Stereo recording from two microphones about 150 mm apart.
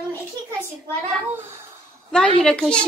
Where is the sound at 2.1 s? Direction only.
5° left (ahead or behind).